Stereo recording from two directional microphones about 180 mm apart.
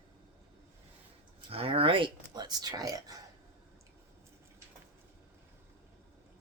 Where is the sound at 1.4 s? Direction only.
30° right (ahead or behind).